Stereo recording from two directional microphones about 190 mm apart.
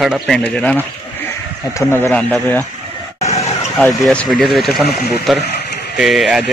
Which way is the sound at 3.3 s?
35° left (ahead or behind).